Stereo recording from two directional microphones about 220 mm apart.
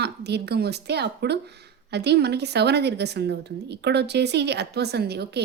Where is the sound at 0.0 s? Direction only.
50° right (ahead or behind).